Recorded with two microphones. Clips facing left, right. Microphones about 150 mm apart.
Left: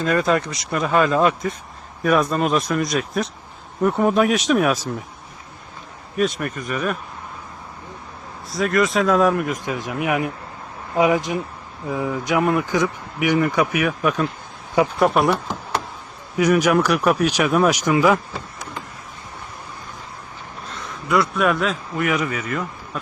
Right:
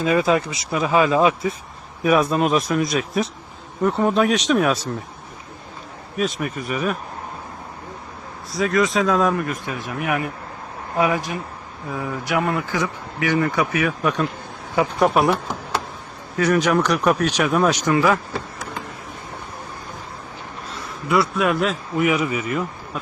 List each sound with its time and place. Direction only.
0.0 s speech: 5° right (ahead or behind)
3.8 s speech: 10° left (ahead or behind)
6.1 s speech: centre (ahead or behind)
8.5 s speech: centre (ahead or behind)
9.5 s speech: 15° left (ahead or behind)
14.0 s speech: centre (ahead or behind)
16.4 s speech: 10° left (ahead or behind)
21.1 s speech: centre (ahead or behind)